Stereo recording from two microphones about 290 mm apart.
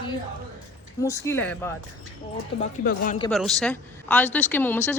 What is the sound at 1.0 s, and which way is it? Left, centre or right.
Speech, centre.